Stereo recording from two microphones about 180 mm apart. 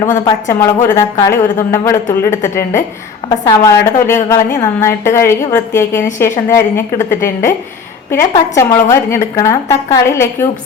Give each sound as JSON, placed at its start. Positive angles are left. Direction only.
{"t": 0.3, "sound": "a woman's voice", "side_deg": 20}